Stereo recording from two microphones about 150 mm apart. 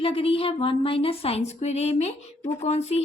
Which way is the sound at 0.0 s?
40° left (ahead or behind).